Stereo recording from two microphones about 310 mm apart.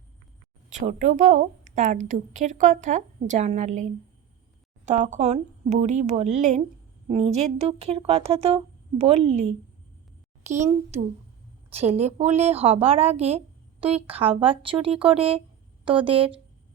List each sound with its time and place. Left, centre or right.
0.7 s a woman's voice: right
4.9 s a woman's voice: right